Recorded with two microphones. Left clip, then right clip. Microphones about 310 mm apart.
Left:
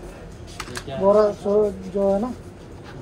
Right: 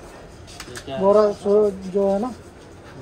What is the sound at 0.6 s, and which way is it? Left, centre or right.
Speech, right.